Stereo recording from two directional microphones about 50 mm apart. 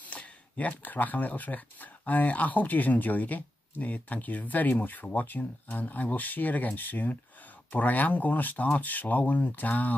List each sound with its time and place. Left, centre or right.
0.0 s speech: left